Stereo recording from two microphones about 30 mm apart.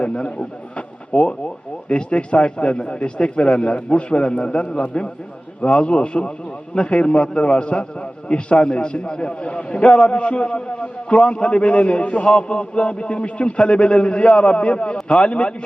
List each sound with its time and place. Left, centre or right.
0.0 s a man's voice: left